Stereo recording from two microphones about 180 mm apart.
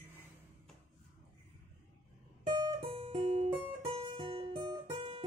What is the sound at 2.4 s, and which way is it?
Guitar, 25° right (ahead or behind).